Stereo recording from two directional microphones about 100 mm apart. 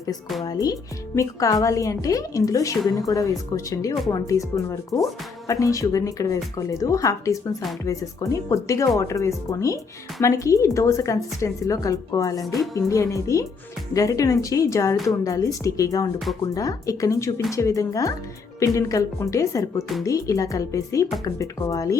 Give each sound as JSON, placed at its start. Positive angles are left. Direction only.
{"t": 0.4, "sound": "speech", "side_deg": 40}